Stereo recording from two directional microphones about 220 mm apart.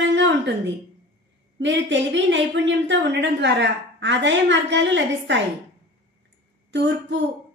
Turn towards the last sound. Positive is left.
turn(degrees=-55)  # may be behind; listen again after turning